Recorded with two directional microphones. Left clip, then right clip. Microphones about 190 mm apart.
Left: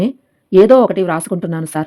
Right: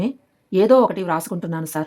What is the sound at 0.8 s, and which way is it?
Speech, centre (ahead or behind).